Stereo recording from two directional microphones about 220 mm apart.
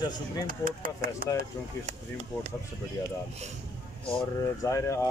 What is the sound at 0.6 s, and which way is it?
Speech, 40° right (ahead or behind).